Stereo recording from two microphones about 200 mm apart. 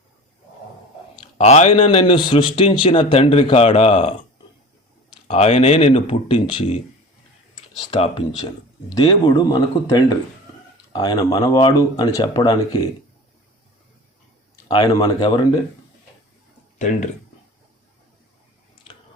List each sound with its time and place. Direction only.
1.2 s a man's voice: 35° left (ahead or behind)
5.3 s a man's voice: 30° left (ahead or behind)
7.9 s a man's voice: 30° left (ahead or behind)
14.7 s a man's voice: 20° left (ahead or behind)
16.7 s speech: 35° left (ahead or behind)